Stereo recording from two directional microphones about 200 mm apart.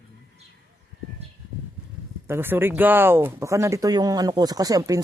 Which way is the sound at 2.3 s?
10° right (ahead or behind).